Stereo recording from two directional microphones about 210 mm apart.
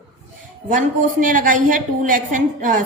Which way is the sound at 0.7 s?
40° right (ahead or behind).